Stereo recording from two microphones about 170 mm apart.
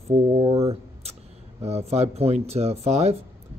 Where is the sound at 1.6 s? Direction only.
40° right (ahead or behind).